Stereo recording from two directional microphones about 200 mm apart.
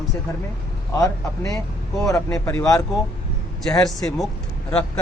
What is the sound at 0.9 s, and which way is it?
Speech, 15° left (ahead or behind).